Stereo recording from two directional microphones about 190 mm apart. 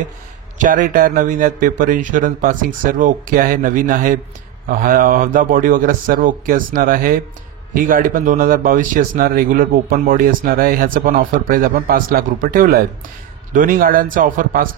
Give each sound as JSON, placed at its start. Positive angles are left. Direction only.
{"t": 0.6, "sound": "speech", "side_deg": -45}